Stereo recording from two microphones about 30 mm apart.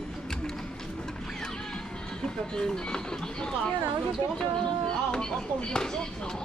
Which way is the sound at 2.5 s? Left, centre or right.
Centre.